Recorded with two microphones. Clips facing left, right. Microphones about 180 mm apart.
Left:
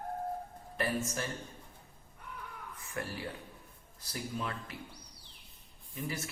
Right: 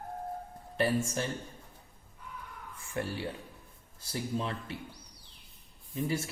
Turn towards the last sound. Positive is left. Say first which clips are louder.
# right 6 dB
turn(degrees=-30)  # may be behind; listen again after turning